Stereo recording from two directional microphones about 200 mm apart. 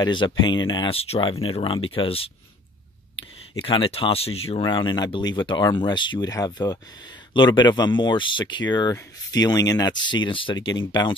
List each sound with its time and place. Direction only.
0.0 s speech: 25° left (ahead or behind)
3.5 s speech: 25° left (ahead or behind)